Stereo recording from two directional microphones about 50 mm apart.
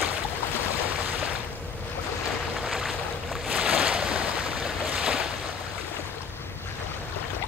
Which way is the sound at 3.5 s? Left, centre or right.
Right.